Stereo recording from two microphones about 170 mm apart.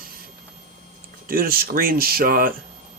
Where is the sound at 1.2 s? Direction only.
60° right (ahead or behind).